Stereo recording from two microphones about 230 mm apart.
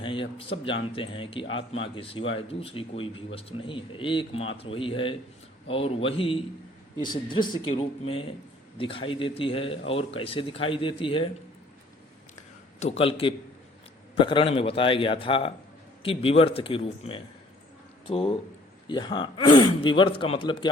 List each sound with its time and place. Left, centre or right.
0.0 s a man's voice: left
12.8 s a man's voice: left